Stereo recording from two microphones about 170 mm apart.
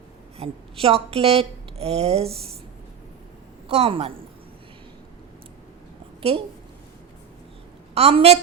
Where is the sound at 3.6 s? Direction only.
35° right (ahead or behind).